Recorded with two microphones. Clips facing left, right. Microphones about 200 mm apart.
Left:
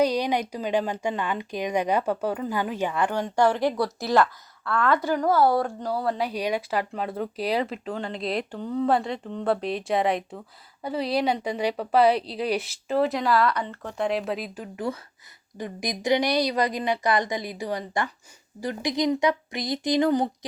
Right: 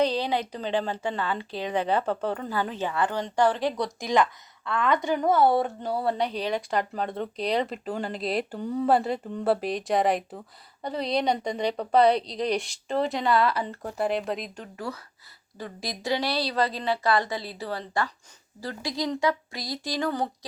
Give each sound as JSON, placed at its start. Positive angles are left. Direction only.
{"t": 0.0, "sound": "a woman's voice", "side_deg": 15}
{"t": 3.8, "sound": "speech", "side_deg": -15}
{"t": 6.1, "sound": "a woman's voice", "side_deg": 5}
{"t": 15.5, "sound": "a woman's voice", "side_deg": 15}